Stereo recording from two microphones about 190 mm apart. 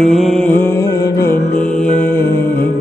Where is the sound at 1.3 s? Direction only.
45° left (ahead or behind).